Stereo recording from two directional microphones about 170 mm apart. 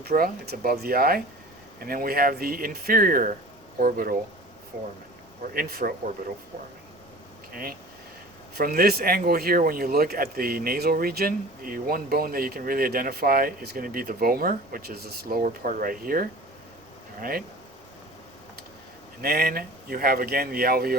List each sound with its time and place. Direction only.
0.0 s speech: 65° right (ahead or behind)
5.5 s speech: 60° right (ahead or behind)
7.5 s speech: 60° right (ahead or behind)
19.2 s speech: 65° right (ahead or behind)